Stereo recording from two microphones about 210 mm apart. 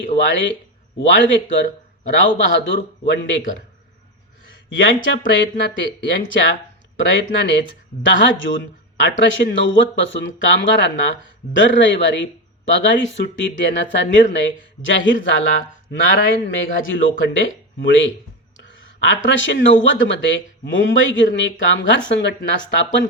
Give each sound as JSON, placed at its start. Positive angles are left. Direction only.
{"t": 0.9, "sound": "speech", "side_deg": 60}
{"t": 4.7, "sound": "speech", "side_deg": 65}